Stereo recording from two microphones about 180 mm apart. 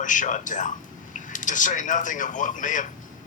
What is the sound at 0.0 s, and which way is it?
A man's voice, 45° left (ahead or behind).